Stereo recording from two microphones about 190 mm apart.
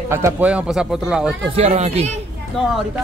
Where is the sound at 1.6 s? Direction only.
35° right (ahead or behind).